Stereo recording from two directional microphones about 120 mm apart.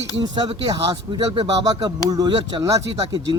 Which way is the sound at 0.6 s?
35° right (ahead or behind).